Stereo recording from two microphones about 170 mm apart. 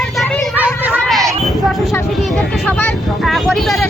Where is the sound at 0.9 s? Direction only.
Centre (ahead or behind).